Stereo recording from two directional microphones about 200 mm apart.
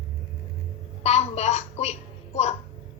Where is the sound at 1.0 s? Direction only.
35° left (ahead or behind).